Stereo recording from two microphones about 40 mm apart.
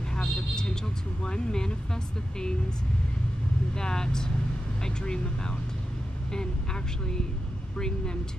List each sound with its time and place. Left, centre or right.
0.1 s vehicle: centre
1.2 s speech: centre
3.7 s speech: centre